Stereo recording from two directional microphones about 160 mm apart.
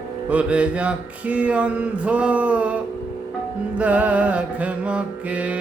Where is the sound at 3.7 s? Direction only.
10° right (ahead or behind).